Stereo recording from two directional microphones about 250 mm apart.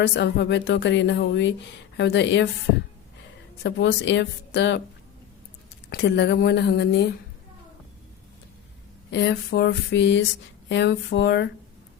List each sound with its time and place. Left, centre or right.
0.0 s speech: left
3.6 s speech: left
5.9 s speech: left
9.1 s speech: left